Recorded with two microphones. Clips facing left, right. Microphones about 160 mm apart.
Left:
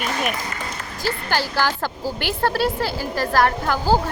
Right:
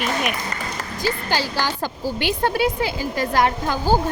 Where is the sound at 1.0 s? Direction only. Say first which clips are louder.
Even; 15° right (ahead or behind).